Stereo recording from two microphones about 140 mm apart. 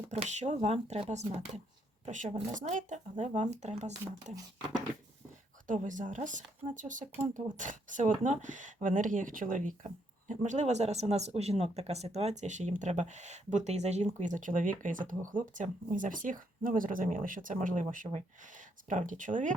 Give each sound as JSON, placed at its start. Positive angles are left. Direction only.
{"t": 0.1, "sound": "speech", "side_deg": -55}
{"t": 5.6, "sound": "speech", "side_deg": -65}